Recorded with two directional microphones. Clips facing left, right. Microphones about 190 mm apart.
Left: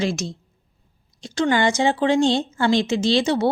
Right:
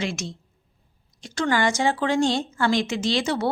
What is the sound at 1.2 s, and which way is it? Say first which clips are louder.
A woman's voice: left 3 dB; 25° left (ahead or behind).